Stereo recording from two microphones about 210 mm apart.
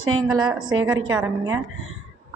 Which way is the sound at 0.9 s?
10° right (ahead or behind).